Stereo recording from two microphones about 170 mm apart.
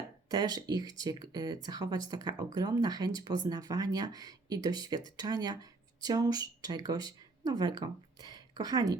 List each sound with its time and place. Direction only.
0.3 s speech: 25° right (ahead or behind)